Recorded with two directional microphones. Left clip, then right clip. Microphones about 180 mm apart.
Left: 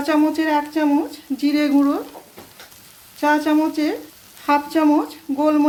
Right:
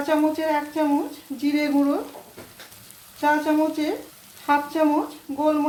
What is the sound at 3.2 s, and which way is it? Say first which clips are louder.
A woman's voice: left 3 dB; 45° left (ahead or behind).